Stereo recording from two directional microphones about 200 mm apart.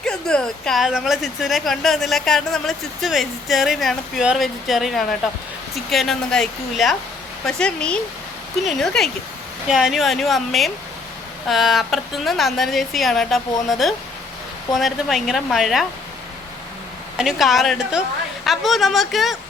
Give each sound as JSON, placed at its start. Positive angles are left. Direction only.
{"t": 0.0, "sound": "speech", "side_deg": 5}
{"t": 17.2, "sound": "speech", "side_deg": 0}